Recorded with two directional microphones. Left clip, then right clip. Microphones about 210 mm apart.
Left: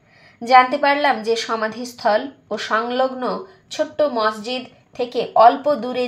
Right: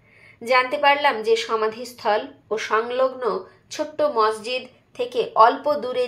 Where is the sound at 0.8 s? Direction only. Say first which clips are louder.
Left 1 dB; 15° right (ahead or behind).